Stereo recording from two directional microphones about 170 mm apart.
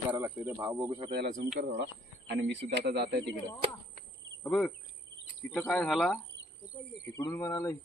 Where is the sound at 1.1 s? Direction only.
75° right (ahead or behind); by 2.6 s 90° right.